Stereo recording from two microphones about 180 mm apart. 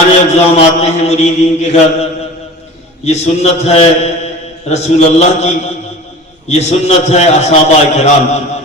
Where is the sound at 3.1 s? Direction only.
35° left (ahead or behind).